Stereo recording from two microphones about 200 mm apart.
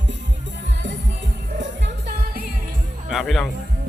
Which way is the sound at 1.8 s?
50° right (ahead or behind).